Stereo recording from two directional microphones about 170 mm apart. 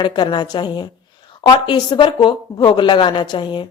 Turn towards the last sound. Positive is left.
turn(degrees=25)  # may be behind; listen again after turning